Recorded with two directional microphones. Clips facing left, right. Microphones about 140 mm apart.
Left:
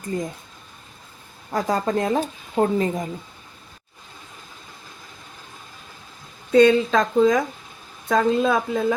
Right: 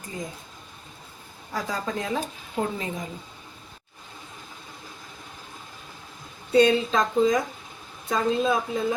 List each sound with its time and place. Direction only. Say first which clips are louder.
0.1 s a woman's voice: left 8 dB; 50° left (ahead or behind)
1.5 s a woman's voice: left 8 dB; 50° left (ahead or behind)
6.5 s a woman's voice: left 4 dB; 50° left (ahead or behind)
8.0 s a woman's voice: left 4 dB; 90° left